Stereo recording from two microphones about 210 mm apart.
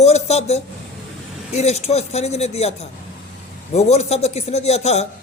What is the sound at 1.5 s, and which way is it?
A man's voice, 30° left (ahead or behind).